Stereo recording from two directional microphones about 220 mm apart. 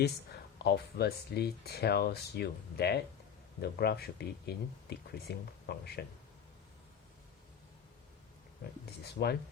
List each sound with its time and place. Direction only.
0.6 s speech: 45° left (ahead or behind)
8.6 s speech: 45° left (ahead or behind)